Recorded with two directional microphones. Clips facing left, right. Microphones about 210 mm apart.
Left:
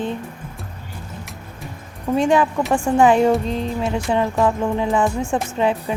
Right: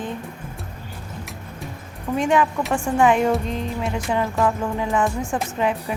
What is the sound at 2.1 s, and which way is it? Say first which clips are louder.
Speech: left 3 dB; 30° left (ahead or behind).